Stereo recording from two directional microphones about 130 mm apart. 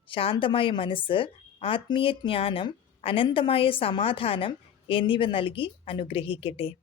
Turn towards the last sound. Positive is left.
turn(degrees=45)  # may be behind; listen again after turning